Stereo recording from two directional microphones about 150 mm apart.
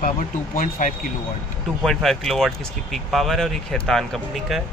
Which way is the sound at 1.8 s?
Centre (ahead or behind).